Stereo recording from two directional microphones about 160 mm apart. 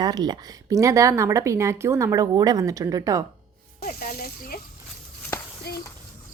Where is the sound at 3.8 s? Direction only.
70° left (ahead or behind).